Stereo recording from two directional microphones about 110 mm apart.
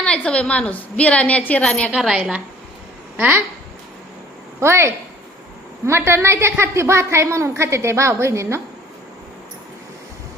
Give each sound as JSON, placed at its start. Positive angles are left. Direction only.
{"t": 0.0, "sound": "a woman's voice", "side_deg": 10}
{"t": 1.9, "sound": "a woman's voice", "side_deg": -5}
{"t": 3.2, "sound": "speech", "side_deg": -15}
{"t": 4.6, "sound": "a woman's voice", "side_deg": -25}